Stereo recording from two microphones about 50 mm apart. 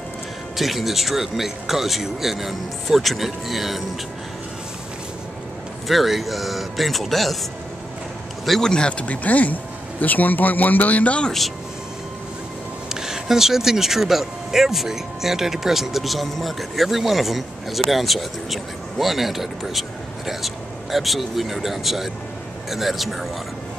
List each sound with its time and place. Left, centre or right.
0.6 s speech: centre
5.9 s speech: centre
8.5 s speech: centre
8.7 s speech: left
12.9 s speech: centre